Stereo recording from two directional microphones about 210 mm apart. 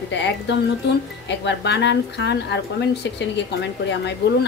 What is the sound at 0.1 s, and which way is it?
Speech, 60° left (ahead or behind).